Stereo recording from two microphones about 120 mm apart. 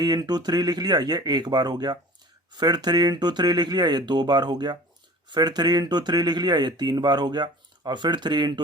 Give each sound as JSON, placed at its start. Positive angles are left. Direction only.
{"t": 0.0, "sound": "speech", "side_deg": -35}